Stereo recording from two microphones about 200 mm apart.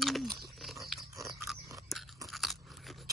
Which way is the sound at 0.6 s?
Centre (ahead or behind).